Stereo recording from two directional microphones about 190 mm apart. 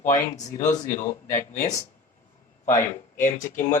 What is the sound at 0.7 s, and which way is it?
Speech, 15° left (ahead or behind).